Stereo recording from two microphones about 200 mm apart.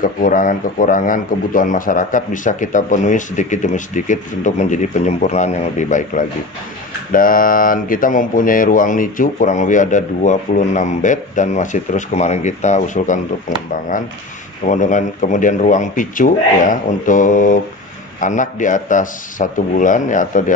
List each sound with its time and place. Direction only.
0.0 s a man's voice: 40° left (ahead or behind)
14.7 s a man's voice: 40° left (ahead or behind)